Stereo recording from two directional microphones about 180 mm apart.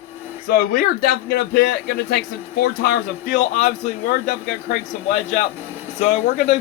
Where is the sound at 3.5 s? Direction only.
40° left (ahead or behind).